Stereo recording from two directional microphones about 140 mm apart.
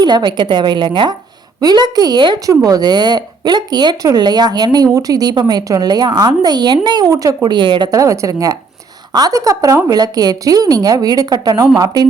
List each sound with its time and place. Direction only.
0.0 s a woman's voice: 30° right (ahead or behind)